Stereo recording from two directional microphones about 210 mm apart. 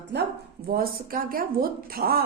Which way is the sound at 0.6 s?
45° right (ahead or behind).